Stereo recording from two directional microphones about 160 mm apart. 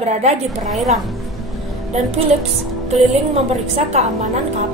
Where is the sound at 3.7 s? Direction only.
45° right (ahead or behind).